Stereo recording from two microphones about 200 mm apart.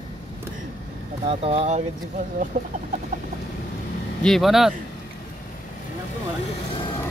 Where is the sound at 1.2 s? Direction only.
30° right (ahead or behind).